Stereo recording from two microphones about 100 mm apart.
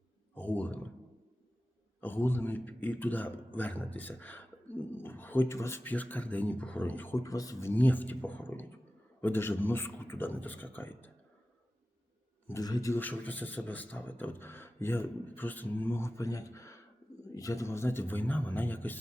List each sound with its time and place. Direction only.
0.3 s speech: 15° left (ahead or behind)
2.0 s speech: 20° left (ahead or behind)
7.2 s speech: 35° left (ahead or behind)
7.7 s speech: 15° left (ahead or behind)
12.5 s speech: 40° left (ahead or behind)
12.9 s speech: 15° left (ahead or behind)